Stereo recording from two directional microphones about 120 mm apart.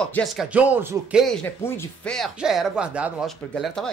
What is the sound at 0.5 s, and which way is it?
Speech, 10° right (ahead or behind).